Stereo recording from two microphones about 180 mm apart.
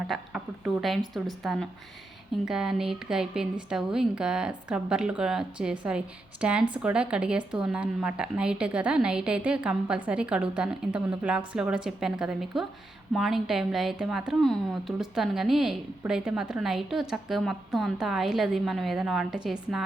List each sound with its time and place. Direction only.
0.1 s a woman's voice: centre (ahead or behind)